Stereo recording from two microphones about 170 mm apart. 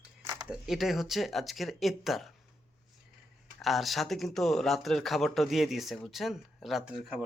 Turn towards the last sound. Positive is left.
turn(degrees=-5)  # may be behind; listen again after turning